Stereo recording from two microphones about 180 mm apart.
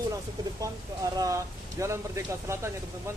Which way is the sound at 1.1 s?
20° right (ahead or behind).